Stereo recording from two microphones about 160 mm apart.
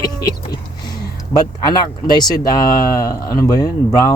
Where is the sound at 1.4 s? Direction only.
25° left (ahead or behind).